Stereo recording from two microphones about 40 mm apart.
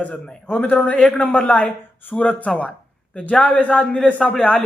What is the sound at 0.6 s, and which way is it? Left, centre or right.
Speech, left.